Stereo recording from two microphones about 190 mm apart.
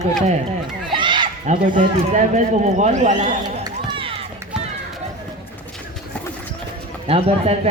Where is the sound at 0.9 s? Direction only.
25° right (ahead or behind).